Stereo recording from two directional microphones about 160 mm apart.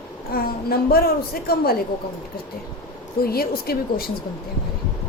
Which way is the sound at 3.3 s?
70° left (ahead or behind).